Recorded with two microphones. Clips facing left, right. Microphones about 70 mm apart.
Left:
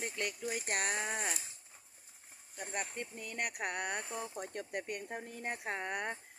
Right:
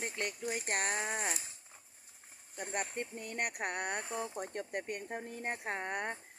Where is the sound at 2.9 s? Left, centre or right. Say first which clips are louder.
Right 3 dB; right.